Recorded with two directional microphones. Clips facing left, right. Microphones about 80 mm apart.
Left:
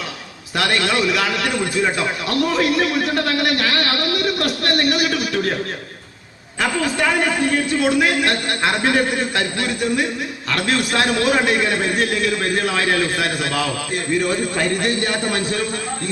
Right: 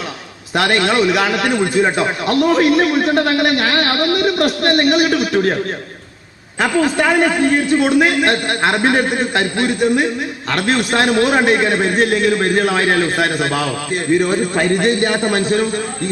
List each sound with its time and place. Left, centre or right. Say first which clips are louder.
0.6 s a man's voice: right 5 dB; right
6.6 s a man's voice: right 5 dB; right